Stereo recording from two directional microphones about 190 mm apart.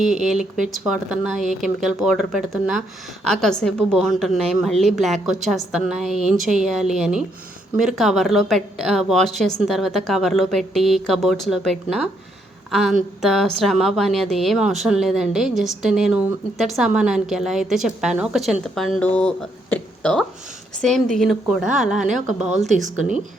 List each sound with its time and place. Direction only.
0.3 s a woman's voice: 5° right (ahead or behind)
22.7 s speech: 40° right (ahead or behind)